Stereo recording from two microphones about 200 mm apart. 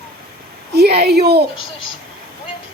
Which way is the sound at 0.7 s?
55° right (ahead or behind).